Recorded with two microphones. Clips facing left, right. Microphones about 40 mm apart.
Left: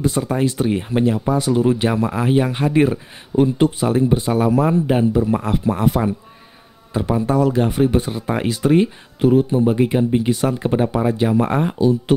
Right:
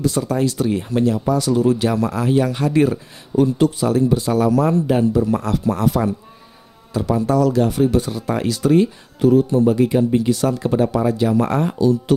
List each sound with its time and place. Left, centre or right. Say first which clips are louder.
0.0 s speech: even; left